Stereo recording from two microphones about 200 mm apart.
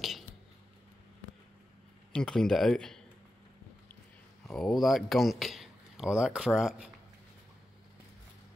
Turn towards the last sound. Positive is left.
turn(degrees=-5)  # may be behind; listen again after turning